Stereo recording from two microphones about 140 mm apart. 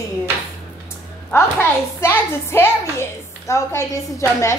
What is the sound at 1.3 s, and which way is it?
A woman's voice, 20° left (ahead or behind).